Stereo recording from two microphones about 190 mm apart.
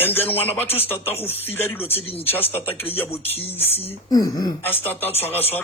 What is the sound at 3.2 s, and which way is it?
Speech, 30° left (ahead or behind).